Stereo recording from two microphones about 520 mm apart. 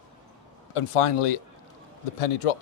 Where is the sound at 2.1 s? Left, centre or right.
Left.